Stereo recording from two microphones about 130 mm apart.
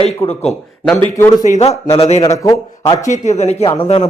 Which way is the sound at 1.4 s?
60° left (ahead or behind).